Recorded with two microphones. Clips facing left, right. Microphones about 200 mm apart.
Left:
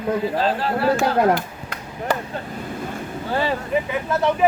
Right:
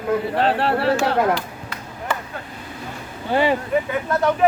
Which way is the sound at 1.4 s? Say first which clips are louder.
Left 1 dB; 50° left (ahead or behind).